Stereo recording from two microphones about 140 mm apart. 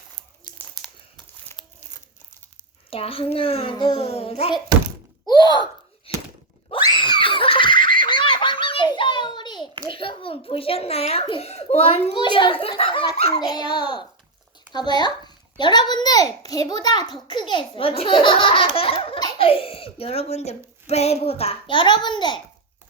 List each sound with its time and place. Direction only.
1.6 s crumpling: 30° left (ahead or behind)
2.9 s a child's voice: 40° left (ahead or behind)
5.2 s a sound: 30° left (ahead or behind)
6.1 s a sound: 45° left (ahead or behind)
6.8 s belly laugh: 30° left (ahead or behind)
9.8 s a child's voice: 35° left (ahead or behind)
12.1 s a child's voice: 35° left (ahead or behind)
13.5 s a child's voice: 30° left (ahead or behind)